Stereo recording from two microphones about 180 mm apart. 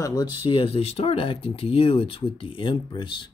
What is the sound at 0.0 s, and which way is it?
Speech, 20° left (ahead or behind).